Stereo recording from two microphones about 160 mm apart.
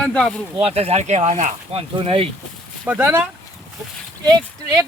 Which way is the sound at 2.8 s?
10° right (ahead or behind).